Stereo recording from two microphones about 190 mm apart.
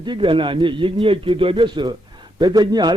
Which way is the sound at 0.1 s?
25° right (ahead or behind).